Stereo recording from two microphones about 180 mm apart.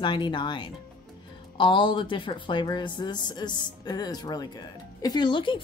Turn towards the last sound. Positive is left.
turn(degrees=25)  # may be behind; listen again after turning